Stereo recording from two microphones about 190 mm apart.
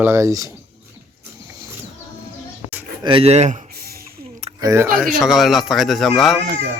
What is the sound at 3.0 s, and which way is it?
Speech, 25° right (ahead or behind).